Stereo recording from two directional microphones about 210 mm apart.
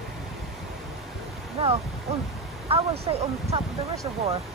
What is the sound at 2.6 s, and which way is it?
Speech, 30° right (ahead or behind).